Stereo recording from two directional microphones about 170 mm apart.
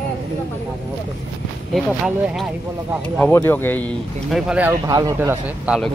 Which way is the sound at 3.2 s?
10° left (ahead or behind).